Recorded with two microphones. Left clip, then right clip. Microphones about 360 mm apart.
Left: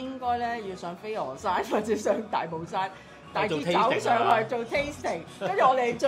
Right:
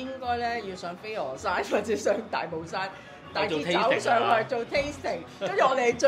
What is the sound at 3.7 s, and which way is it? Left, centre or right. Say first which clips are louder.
A woman's voice: even; left.